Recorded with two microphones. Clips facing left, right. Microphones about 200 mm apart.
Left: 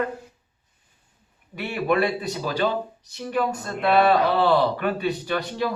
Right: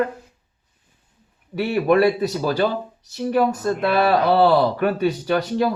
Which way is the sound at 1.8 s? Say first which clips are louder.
Right 5 dB; 40° right (ahead or behind).